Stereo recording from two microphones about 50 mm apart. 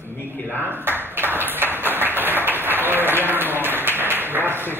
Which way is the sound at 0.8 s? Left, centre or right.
Right.